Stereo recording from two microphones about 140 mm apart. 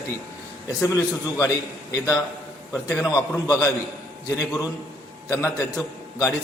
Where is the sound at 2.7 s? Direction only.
20° left (ahead or behind).